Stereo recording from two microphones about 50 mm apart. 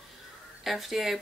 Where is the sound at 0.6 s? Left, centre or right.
Centre.